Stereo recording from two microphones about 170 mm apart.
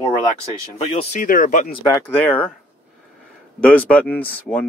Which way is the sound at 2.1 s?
10° left (ahead or behind).